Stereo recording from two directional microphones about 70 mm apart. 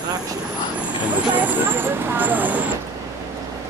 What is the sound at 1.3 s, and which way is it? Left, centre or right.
Vehicle, right.